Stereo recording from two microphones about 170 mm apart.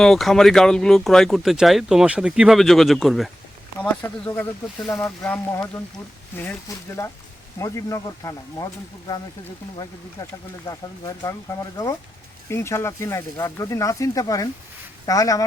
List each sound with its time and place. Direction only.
0.0 s speech: centre (ahead or behind)
4.9 s speech: 10° left (ahead or behind)
10.7 s speech: 20° left (ahead or behind)